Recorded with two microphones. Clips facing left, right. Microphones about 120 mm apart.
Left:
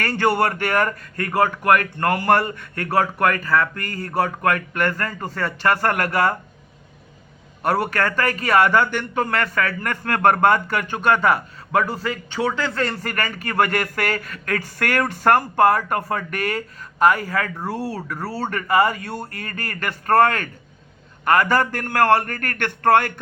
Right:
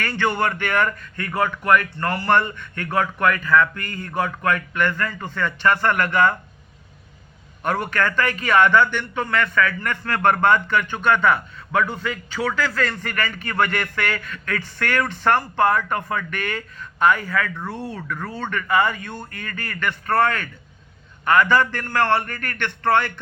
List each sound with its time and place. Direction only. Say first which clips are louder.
0.0 s a man's voice: left 3 dB; 40° left (ahead or behind)
7.6 s a man's voice: left 2 dB; 40° left (ahead or behind)